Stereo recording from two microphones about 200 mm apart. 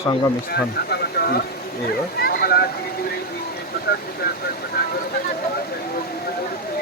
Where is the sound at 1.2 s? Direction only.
50° left (ahead or behind).